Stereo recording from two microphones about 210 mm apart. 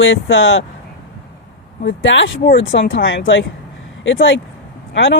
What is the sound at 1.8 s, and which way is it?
Speech, 60° left (ahead or behind).